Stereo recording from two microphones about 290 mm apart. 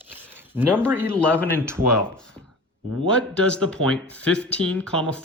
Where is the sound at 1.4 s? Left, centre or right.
Centre.